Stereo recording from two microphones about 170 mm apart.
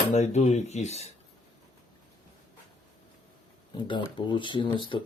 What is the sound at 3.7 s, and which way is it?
Speech, 25° left (ahead or behind).